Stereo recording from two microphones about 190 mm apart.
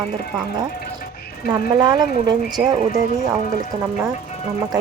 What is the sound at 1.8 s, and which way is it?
Speech, 20° right (ahead or behind).